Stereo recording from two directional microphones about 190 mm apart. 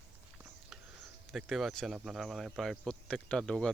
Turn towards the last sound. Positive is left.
turn(degrees=5)  # may be behind; listen again after turning